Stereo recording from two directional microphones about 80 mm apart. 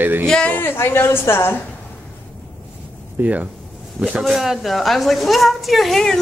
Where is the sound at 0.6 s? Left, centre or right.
Left.